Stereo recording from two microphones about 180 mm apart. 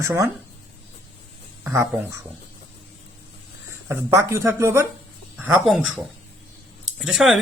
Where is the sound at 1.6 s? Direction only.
15° right (ahead or behind).